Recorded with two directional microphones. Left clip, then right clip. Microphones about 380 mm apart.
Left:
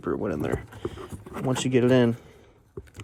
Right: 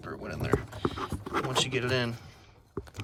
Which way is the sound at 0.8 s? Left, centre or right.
Left.